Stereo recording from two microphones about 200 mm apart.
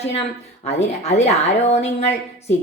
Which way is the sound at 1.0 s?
35° left (ahead or behind).